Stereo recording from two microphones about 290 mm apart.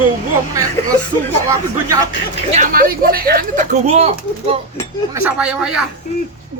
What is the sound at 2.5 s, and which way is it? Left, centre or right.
Speech, right.